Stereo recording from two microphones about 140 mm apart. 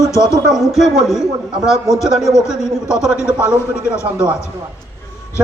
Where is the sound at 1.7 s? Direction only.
20° left (ahead or behind).